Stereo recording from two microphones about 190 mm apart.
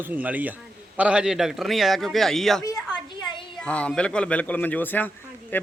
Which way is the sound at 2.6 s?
20° left (ahead or behind).